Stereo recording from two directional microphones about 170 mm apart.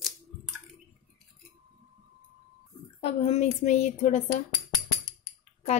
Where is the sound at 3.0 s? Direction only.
35° left (ahead or behind).